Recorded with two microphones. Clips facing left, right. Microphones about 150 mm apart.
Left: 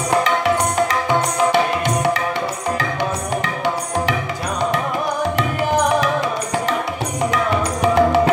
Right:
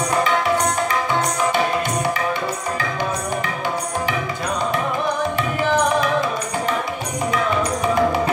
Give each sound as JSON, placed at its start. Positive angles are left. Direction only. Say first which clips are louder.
{"t": 7.8, "sound": "music", "louder": "left 5 dB", "side_deg": 75}